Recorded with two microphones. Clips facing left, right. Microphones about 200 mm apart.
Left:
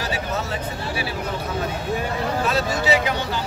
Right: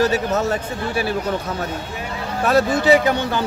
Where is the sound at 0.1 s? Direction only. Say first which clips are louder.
Right 7 dB; 45° right (ahead or behind).